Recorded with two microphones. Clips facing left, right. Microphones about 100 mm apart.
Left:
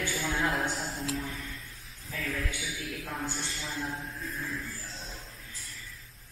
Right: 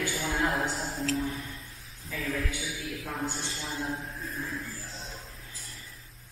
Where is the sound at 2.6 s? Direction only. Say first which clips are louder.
Right 1 dB; 10° right (ahead or behind).